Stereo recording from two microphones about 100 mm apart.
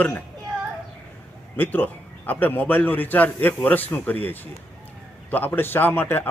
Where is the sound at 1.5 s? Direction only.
20° left (ahead or behind).